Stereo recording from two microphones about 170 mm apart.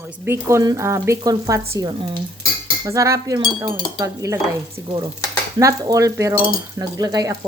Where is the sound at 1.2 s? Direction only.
20° right (ahead or behind).